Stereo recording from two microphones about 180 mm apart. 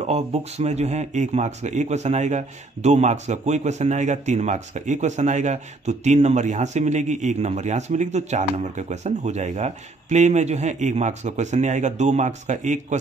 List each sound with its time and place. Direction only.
0.0 s speech: 35° right (ahead or behind)